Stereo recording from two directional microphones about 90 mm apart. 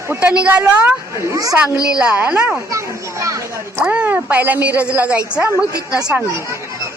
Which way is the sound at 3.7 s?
15° right (ahead or behind).